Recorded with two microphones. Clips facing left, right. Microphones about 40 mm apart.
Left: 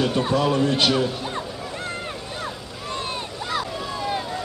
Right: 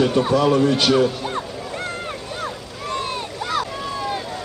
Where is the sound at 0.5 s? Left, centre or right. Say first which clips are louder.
Right 3 dB; left.